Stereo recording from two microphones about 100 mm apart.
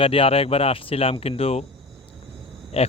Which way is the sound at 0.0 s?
70° left (ahead or behind).